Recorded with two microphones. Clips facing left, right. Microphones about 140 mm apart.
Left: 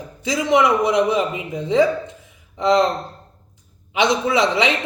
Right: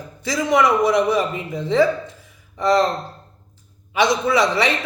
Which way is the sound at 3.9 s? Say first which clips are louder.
Even; 20° left (ahead or behind).